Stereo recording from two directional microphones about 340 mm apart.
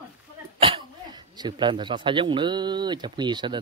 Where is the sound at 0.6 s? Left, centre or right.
Centre.